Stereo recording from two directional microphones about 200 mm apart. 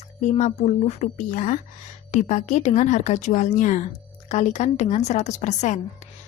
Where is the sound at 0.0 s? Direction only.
35° left (ahead or behind).